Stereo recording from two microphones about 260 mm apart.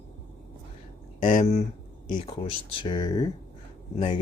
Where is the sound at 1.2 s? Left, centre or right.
Left.